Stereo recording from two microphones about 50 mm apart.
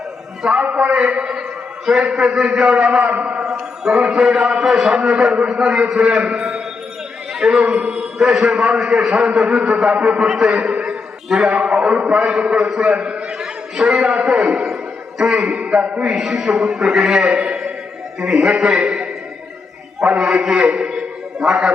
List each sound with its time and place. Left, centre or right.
0.6 s a man's voice: right
10.2 s a man's voice: centre
10.5 s a man's voice: right
10.8 s a sound: centre
11.5 s a sound: centre
12.2 s a man's voice: right
16.1 s a man's voice: centre